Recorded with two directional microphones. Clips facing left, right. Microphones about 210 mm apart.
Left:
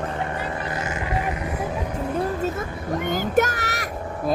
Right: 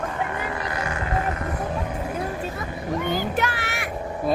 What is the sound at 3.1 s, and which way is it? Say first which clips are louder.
Child singing: left 8 dB; 45° left (ahead or behind).